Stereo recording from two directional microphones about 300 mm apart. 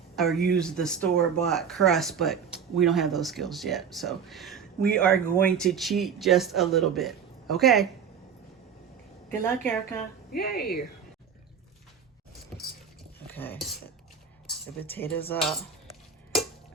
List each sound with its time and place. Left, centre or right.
0.2 s speech: centre
9.4 s a woman's voice: centre
10.3 s speech: left
13.3 s a woman's voice: centre